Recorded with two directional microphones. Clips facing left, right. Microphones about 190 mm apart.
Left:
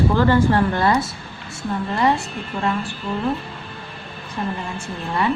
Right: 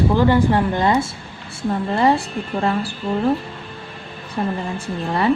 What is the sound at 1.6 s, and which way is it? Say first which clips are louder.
Speech: right 3 dB; 30° right (ahead or behind).